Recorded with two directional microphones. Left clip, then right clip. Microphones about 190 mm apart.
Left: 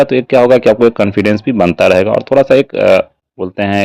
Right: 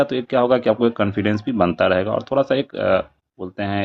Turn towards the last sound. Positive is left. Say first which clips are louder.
# left 10 dB
turn(degrees=45)  # may be behind; listen again after turning